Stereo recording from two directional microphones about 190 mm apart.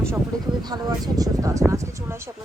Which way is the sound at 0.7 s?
20° right (ahead or behind).